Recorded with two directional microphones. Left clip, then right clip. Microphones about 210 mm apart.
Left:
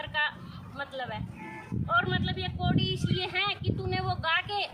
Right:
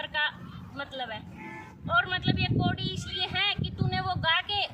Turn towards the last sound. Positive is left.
turn(degrees=-5)  # may be behind; listen again after turning